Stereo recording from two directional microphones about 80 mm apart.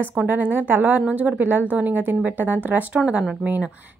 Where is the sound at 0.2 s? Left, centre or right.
Right.